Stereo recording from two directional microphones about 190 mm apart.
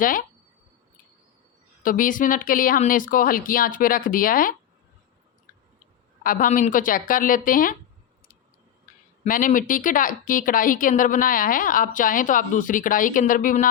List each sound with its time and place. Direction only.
0.0 s a woman's voice: 45° left (ahead or behind)
1.8 s a woman's voice: 45° left (ahead or behind)
6.2 s a woman's voice: 45° left (ahead or behind)
8.9 s a sound: 45° left (ahead or behind)
9.2 s a woman's voice: 45° left (ahead or behind)